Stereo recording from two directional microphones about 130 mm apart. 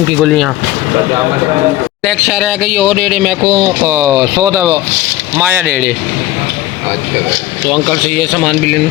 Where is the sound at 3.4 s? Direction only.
25° right (ahead or behind).